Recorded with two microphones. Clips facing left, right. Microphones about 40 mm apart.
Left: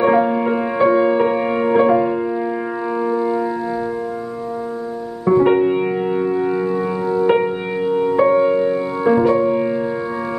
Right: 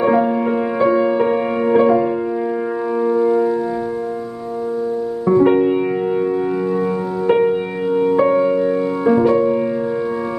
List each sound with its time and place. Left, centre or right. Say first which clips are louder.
0.0 s music: even; centre
3.0 s music: right 4 dB; left
5.2 s music: even; centre
7.2 s music: right 5 dB; centre
8.5 s music: even; left
9.2 s music: right 1 dB; centre